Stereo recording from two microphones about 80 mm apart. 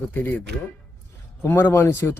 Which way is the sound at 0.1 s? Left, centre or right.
Left.